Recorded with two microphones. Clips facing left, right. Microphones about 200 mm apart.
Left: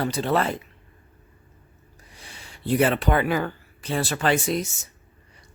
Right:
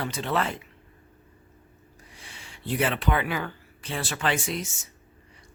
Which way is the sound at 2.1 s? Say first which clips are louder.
Left 3 dB; 40° left (ahead or behind).